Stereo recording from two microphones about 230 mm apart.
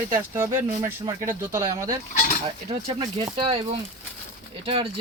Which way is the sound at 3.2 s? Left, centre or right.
Centre.